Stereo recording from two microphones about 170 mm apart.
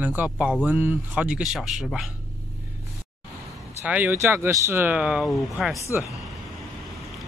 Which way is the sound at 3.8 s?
10° right (ahead or behind).